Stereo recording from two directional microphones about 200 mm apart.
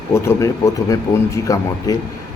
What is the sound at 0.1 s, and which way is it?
Speech, 15° left (ahead or behind).